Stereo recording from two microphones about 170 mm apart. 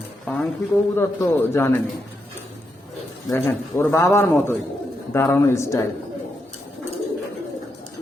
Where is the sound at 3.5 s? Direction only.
15° left (ahead or behind).